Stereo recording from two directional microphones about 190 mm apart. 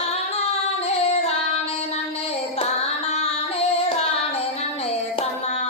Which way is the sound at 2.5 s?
35° left (ahead or behind).